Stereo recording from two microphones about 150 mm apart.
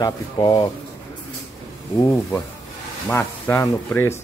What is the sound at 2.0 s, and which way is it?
Speech, 20° left (ahead or behind).